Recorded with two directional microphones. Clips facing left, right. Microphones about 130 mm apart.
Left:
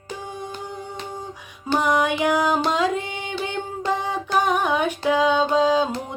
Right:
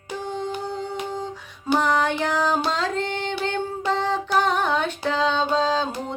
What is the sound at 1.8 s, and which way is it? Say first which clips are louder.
Music: left 2 dB; 15° left (ahead or behind).